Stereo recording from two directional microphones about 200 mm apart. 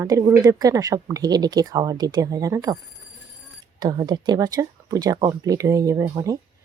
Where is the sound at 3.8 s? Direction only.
20° right (ahead or behind).